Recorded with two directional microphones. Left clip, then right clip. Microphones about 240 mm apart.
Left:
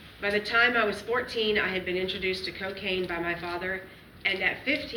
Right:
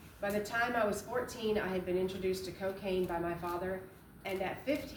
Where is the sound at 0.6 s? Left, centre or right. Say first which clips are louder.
Left 8 dB; right.